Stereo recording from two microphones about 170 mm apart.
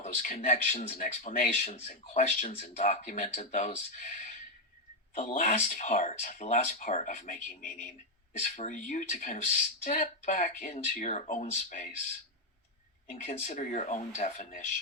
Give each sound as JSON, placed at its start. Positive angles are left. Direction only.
{"t": 0.0, "sound": "speech", "side_deg": 50}
{"t": 13.2, "sound": "speech", "side_deg": 40}